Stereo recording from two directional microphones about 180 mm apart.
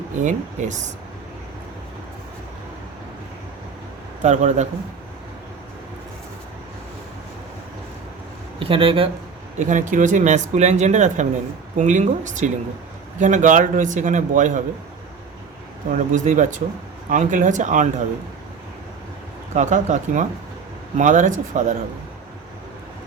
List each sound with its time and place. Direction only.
0.2 s a man's voice: 40° right (ahead or behind)
4.2 s speech: 40° right (ahead or behind)
8.5 s speech: 30° right (ahead or behind)
9.6 s a man's voice: 45° right (ahead or behind)
15.9 s a man's voice: 45° right (ahead or behind)
19.5 s a man's voice: 45° right (ahead or behind)